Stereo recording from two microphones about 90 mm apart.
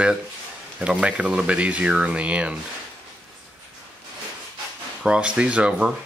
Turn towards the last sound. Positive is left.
turn(degrees=-10)  # may be behind; listen again after turning